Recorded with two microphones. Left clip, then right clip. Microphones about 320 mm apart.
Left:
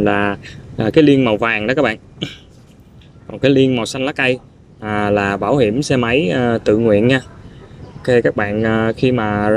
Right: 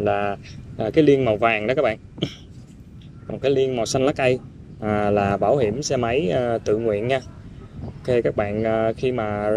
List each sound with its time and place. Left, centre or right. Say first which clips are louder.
0.0 s speech: left 6 dB; left